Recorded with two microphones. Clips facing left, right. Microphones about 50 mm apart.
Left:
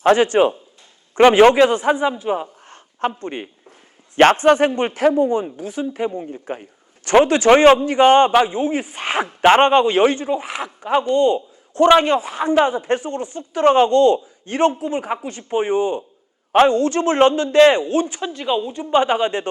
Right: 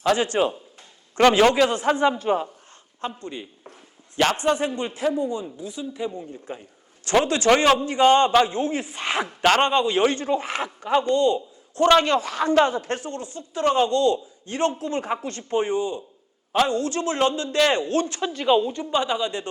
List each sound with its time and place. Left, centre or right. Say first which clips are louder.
0.0 s a man's voice: left 7 dB; left
2.0 s a man's voice: even; centre
3.1 s a man's voice: left 6 dB; left
8.3 s speech: left 3 dB; centre
10.2 s a man's voice: left 1 dB; centre
11.9 s speech: left 3 dB; centre; by 14.7 s left
14.7 s a man's voice: left 3 dB; centre
18.3 s a woman's voice: right 2 dB; centre
18.9 s a man's voice: left 7 dB; left